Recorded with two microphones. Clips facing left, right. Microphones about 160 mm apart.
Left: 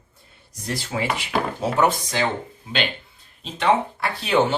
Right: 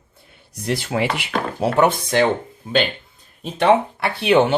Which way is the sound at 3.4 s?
60° right (ahead or behind).